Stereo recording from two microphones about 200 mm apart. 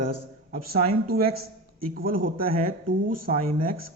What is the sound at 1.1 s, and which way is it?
Speech, 50° right (ahead or behind).